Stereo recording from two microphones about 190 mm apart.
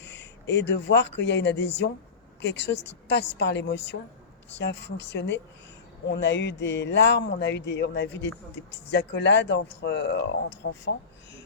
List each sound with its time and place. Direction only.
0.0 s a woman's voice: 65° left (ahead or behind)